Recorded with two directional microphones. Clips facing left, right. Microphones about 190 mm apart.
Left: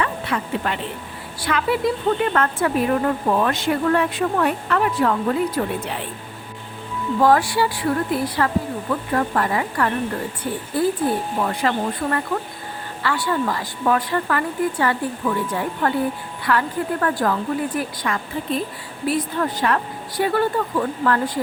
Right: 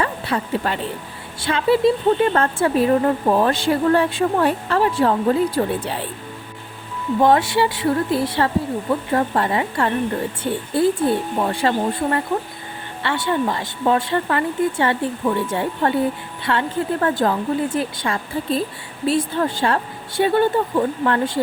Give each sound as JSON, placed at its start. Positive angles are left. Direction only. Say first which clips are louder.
{"t": 0.0, "sound": "a woman's voice", "louder": "right 1 dB", "side_deg": -35}
{"t": 7.2, "sound": "a woman's voice", "louder": "right 1 dB", "side_deg": -25}